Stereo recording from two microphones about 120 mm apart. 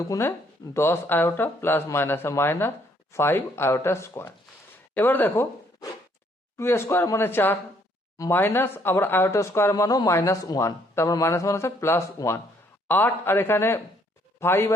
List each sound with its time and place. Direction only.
0.1 s speech: 20° left (ahead or behind)
6.6 s a man's voice: 20° left (ahead or behind)